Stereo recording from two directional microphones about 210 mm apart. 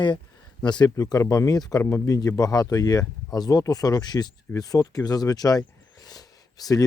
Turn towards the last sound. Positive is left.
turn(degrees=15)  # may be behind; listen again after turning